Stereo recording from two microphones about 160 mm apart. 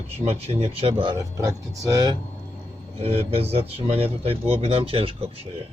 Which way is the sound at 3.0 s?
40° right (ahead or behind).